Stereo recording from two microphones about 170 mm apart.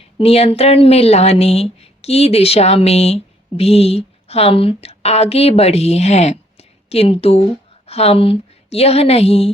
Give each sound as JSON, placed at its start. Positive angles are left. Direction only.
{"t": 0.2, "sound": "a woman's voice", "side_deg": 35}